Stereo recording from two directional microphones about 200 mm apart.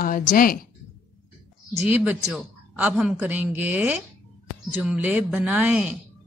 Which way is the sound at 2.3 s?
5° right (ahead or behind).